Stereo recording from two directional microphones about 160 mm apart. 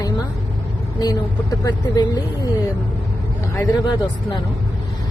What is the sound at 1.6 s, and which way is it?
Speech, 25° left (ahead or behind).